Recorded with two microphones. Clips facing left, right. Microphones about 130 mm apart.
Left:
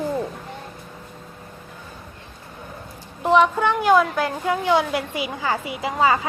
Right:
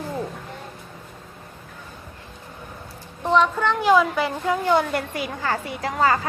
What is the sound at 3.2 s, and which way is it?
A woman's voice, 10° left (ahead or behind).